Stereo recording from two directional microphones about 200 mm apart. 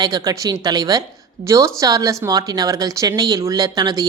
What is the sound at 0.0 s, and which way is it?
Speech, 20° right (ahead or behind).